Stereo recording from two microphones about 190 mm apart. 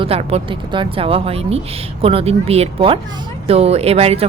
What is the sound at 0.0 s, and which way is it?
Speech, 30° right (ahead or behind).